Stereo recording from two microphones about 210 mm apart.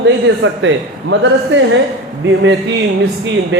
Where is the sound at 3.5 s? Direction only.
55° right (ahead or behind).